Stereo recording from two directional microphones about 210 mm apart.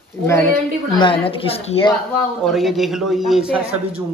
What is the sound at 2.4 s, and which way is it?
A man's voice, centre (ahead or behind).